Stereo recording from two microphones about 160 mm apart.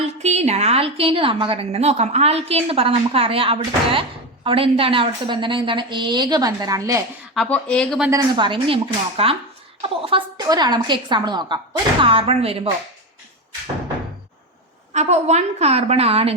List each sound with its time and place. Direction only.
0.2 s a woman's voice: 45° right (ahead or behind); by 7.0 s 20° right (ahead or behind)
7.3 s speech: 10° left (ahead or behind)
8.1 s a woman's voice: 30° right (ahead or behind)
14.9 s a woman's voice: 45° right (ahead or behind)